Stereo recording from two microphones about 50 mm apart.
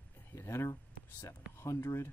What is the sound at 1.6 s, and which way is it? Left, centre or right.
Speech, left.